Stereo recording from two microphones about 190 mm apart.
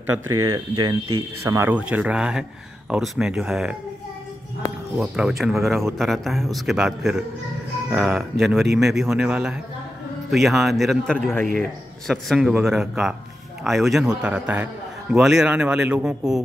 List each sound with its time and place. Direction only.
0.4 s a man's voice: 20° right (ahead or behind); by 3.7 s 5° right (ahead or behind)
4.9 s a man's voice: 5° right (ahead or behind)